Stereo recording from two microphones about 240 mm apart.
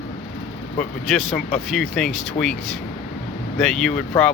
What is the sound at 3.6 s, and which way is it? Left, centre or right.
Speech, centre.